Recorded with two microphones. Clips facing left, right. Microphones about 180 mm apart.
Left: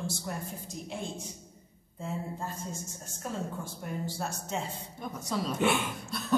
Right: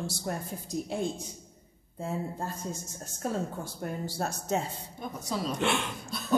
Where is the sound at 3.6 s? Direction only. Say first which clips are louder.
Right 2 dB; 40° right (ahead or behind).